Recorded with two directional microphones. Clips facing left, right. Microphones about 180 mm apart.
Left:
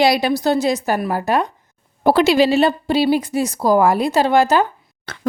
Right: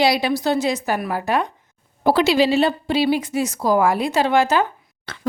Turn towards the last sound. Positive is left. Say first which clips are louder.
# left 2 dB
turn(degrees=45)  # may be behind; listen again after turning